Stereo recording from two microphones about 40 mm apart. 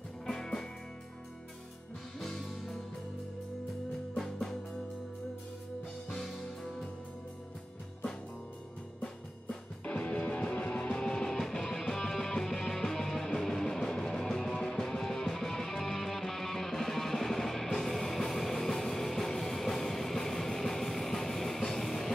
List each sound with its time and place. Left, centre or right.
0.3 s music: centre
2.1 s music: centre
4.2 s music: centre
6.0 s music: centre
9.8 s music: left
11.2 s music: centre